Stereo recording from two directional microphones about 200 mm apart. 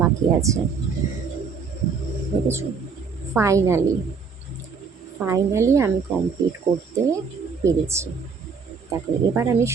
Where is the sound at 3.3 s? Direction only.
15° right (ahead or behind).